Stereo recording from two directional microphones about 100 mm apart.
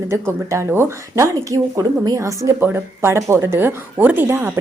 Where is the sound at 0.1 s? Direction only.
30° right (ahead or behind).